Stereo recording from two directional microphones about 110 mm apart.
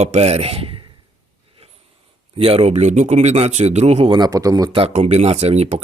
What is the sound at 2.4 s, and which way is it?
Speech, 60° right (ahead or behind).